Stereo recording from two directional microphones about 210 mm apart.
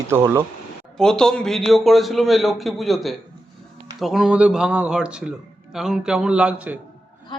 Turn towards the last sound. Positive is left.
turn(degrees=-5)  # may be behind; listen again after turning